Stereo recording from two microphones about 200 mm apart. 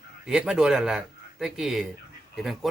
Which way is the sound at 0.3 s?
5° right (ahead or behind).